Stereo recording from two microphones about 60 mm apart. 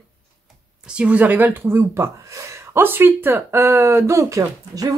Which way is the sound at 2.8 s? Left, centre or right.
Right.